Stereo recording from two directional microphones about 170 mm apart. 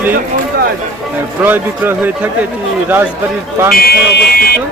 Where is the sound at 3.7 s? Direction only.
65° left (ahead or behind).